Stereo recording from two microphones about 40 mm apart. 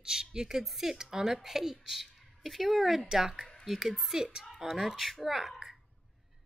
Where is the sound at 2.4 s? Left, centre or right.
Centre.